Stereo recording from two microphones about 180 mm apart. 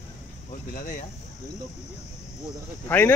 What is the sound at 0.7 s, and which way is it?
Speech, 50° left (ahead or behind).